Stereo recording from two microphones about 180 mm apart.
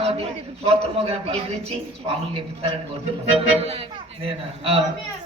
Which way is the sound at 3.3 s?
35° right (ahead or behind).